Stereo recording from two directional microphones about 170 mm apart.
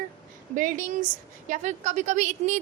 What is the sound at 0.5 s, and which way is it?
A woman's voice, 50° right (ahead or behind).